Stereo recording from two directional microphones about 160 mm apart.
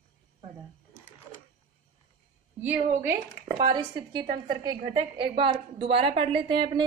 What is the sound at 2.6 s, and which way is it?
Speech, 15° right (ahead or behind).